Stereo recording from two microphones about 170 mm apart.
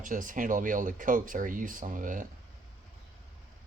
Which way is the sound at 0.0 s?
50° right (ahead or behind).